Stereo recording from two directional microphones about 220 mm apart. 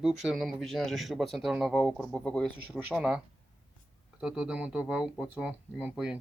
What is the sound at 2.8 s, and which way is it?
Speech, 5° right (ahead or behind).